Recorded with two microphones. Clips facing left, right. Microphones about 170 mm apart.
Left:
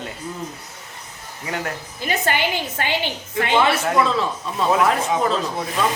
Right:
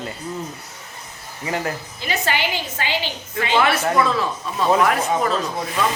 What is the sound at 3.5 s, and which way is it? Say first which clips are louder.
Speech: even; 20° left (ahead or behind).